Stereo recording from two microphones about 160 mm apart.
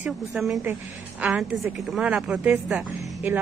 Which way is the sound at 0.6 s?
10° right (ahead or behind).